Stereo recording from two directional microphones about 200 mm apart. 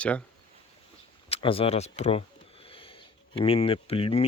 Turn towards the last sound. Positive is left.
turn(degrees=30)  # may be behind; listen again after turning